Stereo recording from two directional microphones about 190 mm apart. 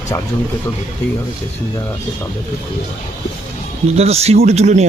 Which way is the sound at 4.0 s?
35° right (ahead or behind).